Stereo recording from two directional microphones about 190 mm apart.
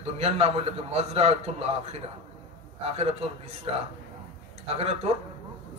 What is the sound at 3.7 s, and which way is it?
Speech, 30° right (ahead or behind).